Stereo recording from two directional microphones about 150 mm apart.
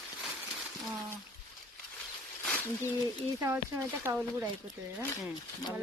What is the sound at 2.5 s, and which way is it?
Bird, 10° left (ahead or behind).